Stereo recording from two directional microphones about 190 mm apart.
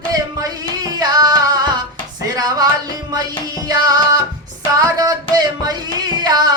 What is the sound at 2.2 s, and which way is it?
Music, 20° right (ahead or behind).